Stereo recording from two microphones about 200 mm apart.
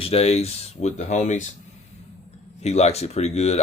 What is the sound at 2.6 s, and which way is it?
Speech, 30° left (ahead or behind).